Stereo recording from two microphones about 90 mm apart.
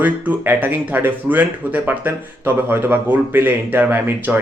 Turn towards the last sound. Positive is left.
turn(degrees=-20)  # may be behind; listen again after turning